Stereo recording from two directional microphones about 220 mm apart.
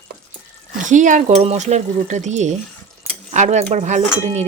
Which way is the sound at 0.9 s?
35° right (ahead or behind).